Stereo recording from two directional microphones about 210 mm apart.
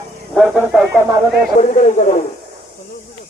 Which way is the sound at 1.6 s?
35° left (ahead or behind).